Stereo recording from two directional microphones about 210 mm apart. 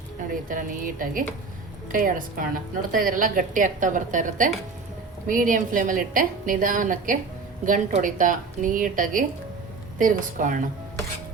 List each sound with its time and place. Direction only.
0.4 s a woman's voice: 40° right (ahead or behind)